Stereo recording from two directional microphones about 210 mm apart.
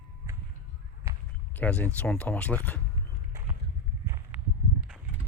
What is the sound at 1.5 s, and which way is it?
Speech, 5° left (ahead or behind).